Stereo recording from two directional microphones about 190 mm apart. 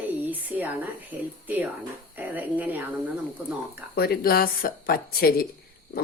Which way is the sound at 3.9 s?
55° left (ahead or behind).